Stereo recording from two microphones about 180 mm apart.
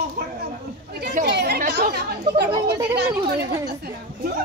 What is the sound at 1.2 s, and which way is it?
Chatter, 65° right (ahead or behind).